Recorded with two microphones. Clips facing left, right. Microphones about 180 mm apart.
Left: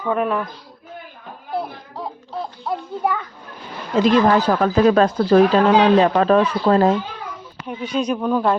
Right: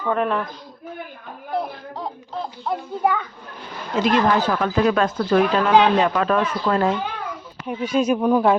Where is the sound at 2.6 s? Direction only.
Centre (ahead or behind).